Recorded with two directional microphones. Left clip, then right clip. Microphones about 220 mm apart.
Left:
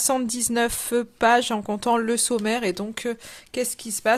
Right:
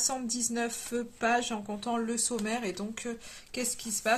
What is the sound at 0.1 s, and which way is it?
Speech, 50° left (ahead or behind).